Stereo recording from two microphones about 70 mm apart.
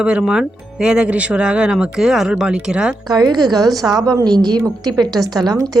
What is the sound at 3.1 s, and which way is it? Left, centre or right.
A woman's voice, right.